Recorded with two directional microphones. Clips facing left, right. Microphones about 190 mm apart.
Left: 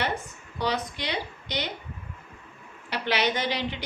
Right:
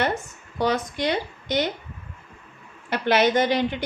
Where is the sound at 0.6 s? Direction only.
50° right (ahead or behind).